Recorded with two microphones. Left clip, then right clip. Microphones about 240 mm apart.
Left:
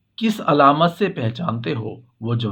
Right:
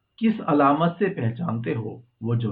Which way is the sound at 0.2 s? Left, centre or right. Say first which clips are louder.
Left 5 dB; left.